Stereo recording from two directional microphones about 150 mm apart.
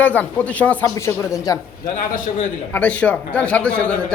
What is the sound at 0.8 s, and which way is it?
Speech, 20° left (ahead or behind).